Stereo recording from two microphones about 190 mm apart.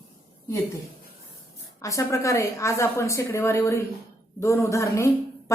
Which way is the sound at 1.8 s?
15° left (ahead or behind).